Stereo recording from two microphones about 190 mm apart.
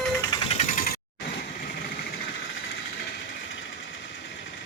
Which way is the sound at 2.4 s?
75° left (ahead or behind).